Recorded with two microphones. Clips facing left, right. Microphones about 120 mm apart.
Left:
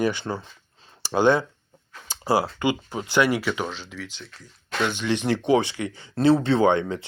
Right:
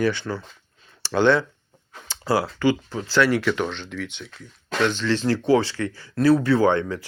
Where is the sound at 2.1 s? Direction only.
15° left (ahead or behind).